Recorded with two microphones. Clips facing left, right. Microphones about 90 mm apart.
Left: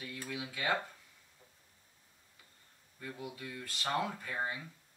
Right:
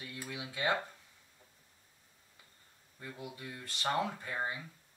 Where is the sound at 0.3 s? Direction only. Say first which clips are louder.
Right 1 dB; 25° right (ahead or behind).